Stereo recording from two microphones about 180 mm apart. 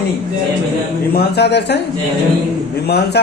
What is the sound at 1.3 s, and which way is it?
Speech, 70° left (ahead or behind).